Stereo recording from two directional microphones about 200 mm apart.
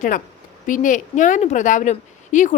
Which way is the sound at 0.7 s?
40° left (ahead or behind).